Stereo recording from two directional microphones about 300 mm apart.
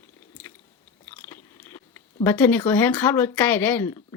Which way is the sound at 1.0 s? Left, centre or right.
Centre.